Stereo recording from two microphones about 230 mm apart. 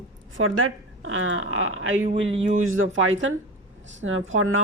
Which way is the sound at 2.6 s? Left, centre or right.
Right.